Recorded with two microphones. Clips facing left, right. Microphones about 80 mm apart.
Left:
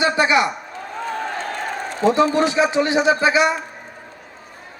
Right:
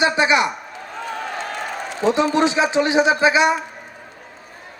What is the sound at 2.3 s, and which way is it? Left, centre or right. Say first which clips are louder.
A man's voice: even; right.